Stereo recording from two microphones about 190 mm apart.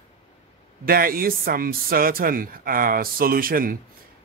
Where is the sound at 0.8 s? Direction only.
50° right (ahead or behind).